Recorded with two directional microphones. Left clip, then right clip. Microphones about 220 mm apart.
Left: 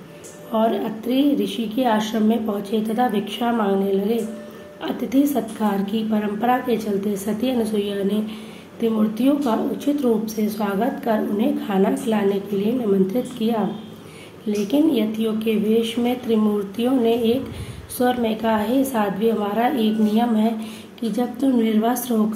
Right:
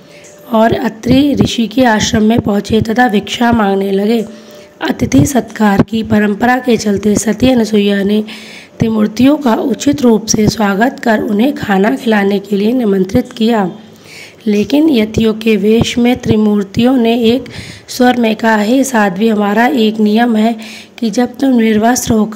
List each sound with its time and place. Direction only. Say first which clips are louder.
0.5 s speech: right 10 dB; 50° right (ahead or behind)